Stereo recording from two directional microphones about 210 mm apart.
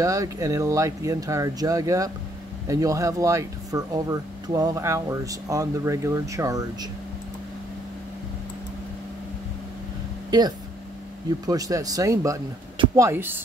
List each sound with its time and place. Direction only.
0.0 s speech: 15° right (ahead or behind)
11.4 s speech: 15° right (ahead or behind)